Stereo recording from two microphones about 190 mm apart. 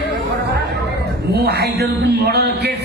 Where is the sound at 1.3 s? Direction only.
55° right (ahead or behind).